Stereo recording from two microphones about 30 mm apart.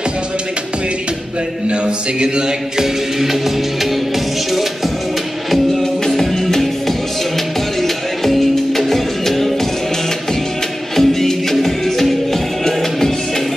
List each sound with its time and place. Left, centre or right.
1.7 s music: right
2.8 s music: centre
5.5 s music: centre
7.8 s music: centre
11.0 s music: centre